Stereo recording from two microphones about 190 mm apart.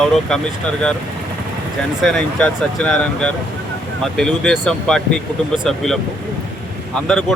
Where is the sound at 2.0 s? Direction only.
Centre (ahead or behind).